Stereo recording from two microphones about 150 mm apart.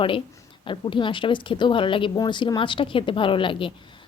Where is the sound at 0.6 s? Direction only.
35° left (ahead or behind).